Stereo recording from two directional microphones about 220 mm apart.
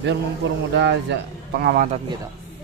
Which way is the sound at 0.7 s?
50° right (ahead or behind).